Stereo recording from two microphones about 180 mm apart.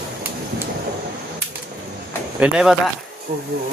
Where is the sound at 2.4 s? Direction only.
5° right (ahead or behind).